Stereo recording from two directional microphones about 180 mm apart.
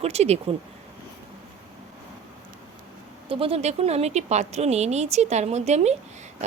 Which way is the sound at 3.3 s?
30° right (ahead or behind).